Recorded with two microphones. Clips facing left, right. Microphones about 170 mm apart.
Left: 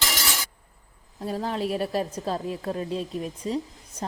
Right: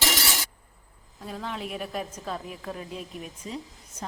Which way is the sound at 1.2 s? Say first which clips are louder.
Left 7 dB; 40° left (ahead or behind).